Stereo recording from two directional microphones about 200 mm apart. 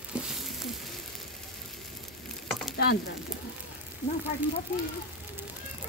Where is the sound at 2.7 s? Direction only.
50° left (ahead or behind).